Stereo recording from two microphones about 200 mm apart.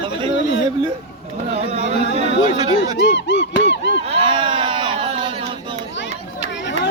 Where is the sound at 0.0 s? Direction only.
25° right (ahead or behind).